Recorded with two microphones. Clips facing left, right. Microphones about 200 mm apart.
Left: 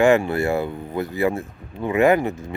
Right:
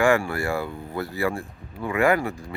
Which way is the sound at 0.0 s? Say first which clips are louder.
Left 4 dB; 20° left (ahead or behind).